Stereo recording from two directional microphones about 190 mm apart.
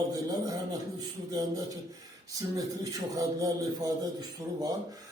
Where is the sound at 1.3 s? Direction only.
20° right (ahead or behind).